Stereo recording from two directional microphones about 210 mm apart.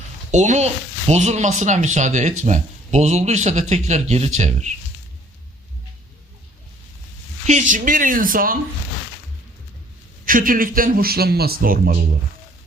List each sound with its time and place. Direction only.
0.3 s speech: 35° right (ahead or behind)
7.7 s speech: 40° right (ahead or behind)
10.2 s a man's voice: 40° right (ahead or behind)